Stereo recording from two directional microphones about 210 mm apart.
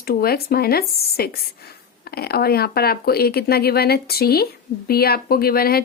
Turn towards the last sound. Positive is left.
turn(degrees=45)  # may be behind; listen again after turning